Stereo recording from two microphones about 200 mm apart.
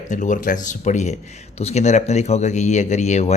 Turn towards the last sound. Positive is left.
turn(degrees=35)  # may be behind; listen again after turning